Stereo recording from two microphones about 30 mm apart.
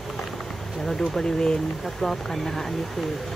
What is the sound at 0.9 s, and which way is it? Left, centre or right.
Speech, centre.